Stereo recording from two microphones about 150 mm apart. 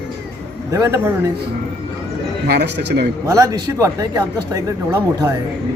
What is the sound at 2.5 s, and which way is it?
Speech, 90° right.